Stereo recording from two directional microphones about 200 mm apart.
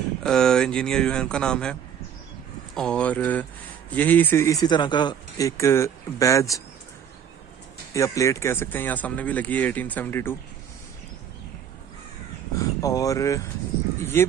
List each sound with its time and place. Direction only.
0.2 s speech: 5° left (ahead or behind)
7.9 s speech: 15° left (ahead or behind)
12.5 s speech: 15° left (ahead or behind)